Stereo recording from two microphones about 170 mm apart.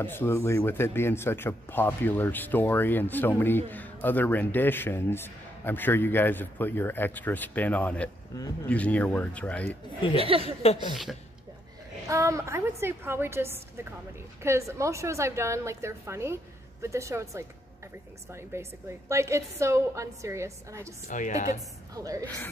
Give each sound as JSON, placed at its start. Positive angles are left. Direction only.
{"t": 0.0, "sound": "speech", "side_deg": 15}
{"t": 10.4, "sound": "speech", "side_deg": 35}
{"t": 12.1, "sound": "a woman's voice", "side_deg": -20}
{"t": 21.1, "sound": "speech", "side_deg": 50}
{"t": 21.5, "sound": "a woman's voice", "side_deg": -20}